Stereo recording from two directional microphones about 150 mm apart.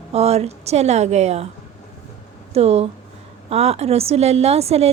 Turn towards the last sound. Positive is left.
turn(degrees=-45)  # may be behind; listen again after turning